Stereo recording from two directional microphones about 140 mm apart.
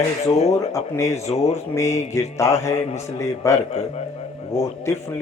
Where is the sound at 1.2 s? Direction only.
50° left (ahead or behind).